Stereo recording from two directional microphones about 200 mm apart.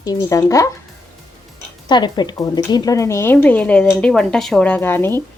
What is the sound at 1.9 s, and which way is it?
A woman's voice, 20° left (ahead or behind).